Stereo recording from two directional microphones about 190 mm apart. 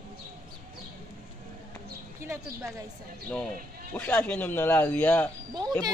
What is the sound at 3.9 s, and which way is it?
A man's voice, 10° left (ahead or behind).